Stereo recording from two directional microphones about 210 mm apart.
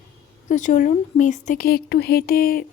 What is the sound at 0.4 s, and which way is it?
Speech, 35° left (ahead or behind).